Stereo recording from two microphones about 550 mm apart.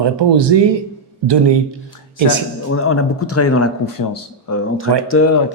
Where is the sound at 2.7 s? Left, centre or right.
Left.